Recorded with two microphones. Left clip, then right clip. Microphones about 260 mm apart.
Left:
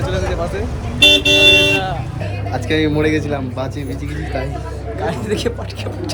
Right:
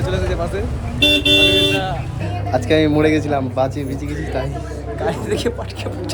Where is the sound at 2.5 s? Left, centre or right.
Centre.